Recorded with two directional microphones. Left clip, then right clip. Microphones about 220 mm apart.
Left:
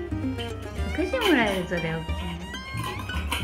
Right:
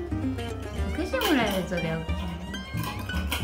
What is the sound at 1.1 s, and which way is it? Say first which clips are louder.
Music: left 2 dB; 20° left (ahead or behind).